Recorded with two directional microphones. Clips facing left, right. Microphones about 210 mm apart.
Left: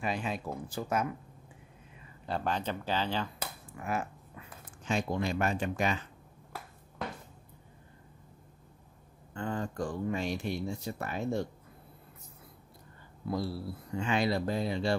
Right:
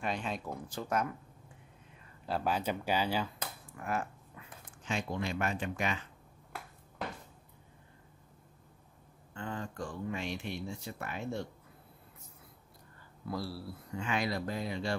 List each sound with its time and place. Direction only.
0.0 s speech: 5° left (ahead or behind)
2.2 s speech: 5° right (ahead or behind)
3.3 s speech: 5° left (ahead or behind)
4.8 s speech: 40° left (ahead or behind)
9.3 s speech: 40° left (ahead or behind)
13.3 s speech: 20° left (ahead or behind)